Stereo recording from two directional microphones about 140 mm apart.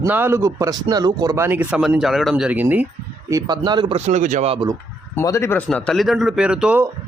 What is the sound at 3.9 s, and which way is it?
Speech, 55° right (ahead or behind).